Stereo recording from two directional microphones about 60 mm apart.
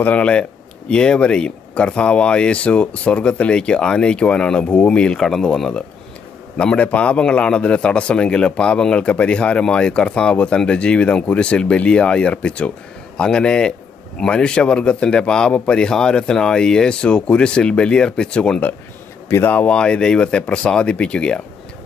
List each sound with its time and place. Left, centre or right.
0.0 s a man's voice: left
5.1 s a man's voice: centre
19.4 s speech: left
19.7 s a man's voice: centre